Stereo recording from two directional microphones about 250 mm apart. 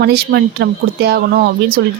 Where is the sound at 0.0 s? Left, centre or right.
Right.